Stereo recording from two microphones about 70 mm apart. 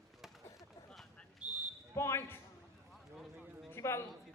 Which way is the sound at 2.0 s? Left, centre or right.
Left.